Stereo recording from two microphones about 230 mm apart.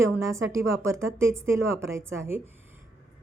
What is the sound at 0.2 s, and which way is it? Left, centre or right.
A woman's voice, centre.